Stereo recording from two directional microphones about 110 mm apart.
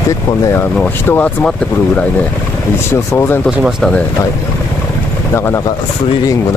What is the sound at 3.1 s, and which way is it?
Speech, 25° left (ahead or behind).